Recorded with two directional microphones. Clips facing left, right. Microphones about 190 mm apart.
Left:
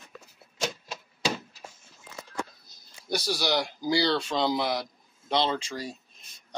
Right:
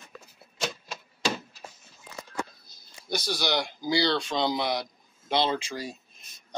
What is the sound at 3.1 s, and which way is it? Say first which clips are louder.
Speech: left 1 dB; 5° left (ahead or behind).